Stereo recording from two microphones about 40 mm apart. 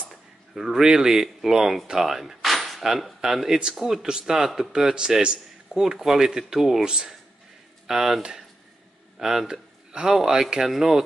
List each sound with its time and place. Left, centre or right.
0.1 s speech: centre
5.7 s speech: centre
6.8 s speech: right
7.8 s speech: centre